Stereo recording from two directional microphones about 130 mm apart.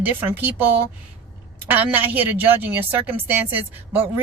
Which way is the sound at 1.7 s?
15° right (ahead or behind).